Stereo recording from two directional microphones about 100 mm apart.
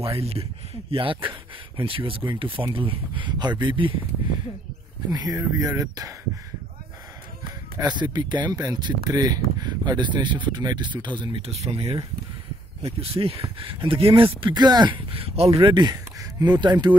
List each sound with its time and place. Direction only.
0.0 s speech: 80° right; by 4.0 s 55° right (ahead or behind)
5.1 s speech: 40° right (ahead or behind)
7.8 s speech: 45° right (ahead or behind)
11.4 s speech: 85° right; by 14.5 s 65° right (ahead or behind)
14.5 s speech: 45° right (ahead or behind); by 15.5 s 85° right
15.6 s speech: 45° right (ahead or behind)